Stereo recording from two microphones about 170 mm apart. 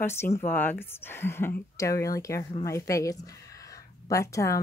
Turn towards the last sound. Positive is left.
turn(degrees=20)  # may be behind; listen again after turning